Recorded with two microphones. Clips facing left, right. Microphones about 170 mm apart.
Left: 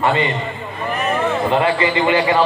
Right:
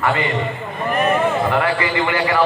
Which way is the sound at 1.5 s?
20° left (ahead or behind).